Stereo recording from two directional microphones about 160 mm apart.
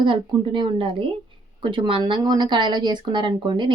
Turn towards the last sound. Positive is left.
turn(degrees=-30)  # may be behind; listen again after turning